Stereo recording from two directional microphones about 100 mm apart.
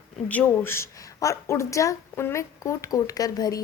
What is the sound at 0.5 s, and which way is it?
Speech, 25° left (ahead or behind).